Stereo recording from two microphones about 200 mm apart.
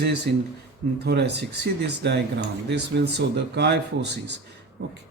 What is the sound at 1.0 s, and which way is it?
Speech, 55° right (ahead or behind).